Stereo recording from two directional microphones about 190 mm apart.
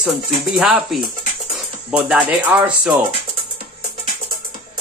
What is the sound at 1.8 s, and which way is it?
Speech, 5° right (ahead or behind).